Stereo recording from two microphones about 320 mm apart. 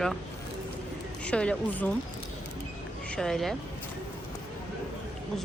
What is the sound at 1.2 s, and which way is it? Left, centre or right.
Speech, centre.